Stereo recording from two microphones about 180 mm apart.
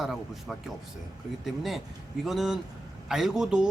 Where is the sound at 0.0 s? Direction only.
Centre (ahead or behind).